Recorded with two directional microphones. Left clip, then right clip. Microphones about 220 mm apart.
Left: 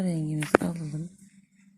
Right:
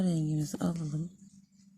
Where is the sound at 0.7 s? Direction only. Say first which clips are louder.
Left 1 dB; 35° right (ahead or behind).